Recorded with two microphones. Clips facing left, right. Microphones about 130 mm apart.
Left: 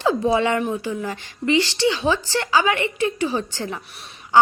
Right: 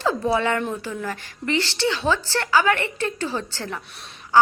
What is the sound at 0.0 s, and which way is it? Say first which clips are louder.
A woman's voice: left 3 dB; 15° left (ahead or behind).